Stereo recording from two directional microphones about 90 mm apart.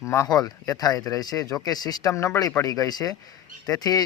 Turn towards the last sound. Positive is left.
turn(degrees=45)  # may be behind; listen again after turning